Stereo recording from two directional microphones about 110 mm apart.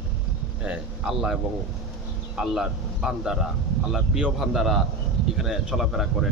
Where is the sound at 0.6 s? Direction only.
10° right (ahead or behind).